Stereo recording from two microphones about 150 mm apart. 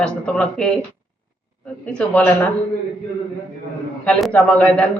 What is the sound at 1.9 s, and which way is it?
Speech, 10° left (ahead or behind).